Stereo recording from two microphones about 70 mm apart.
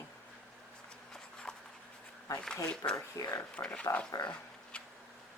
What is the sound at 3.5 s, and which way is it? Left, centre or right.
Speech, centre.